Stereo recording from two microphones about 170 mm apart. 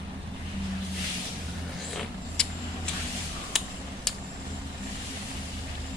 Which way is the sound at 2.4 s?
5° left (ahead or behind).